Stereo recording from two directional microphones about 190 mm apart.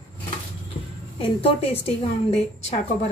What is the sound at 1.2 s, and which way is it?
Speech, 30° left (ahead or behind).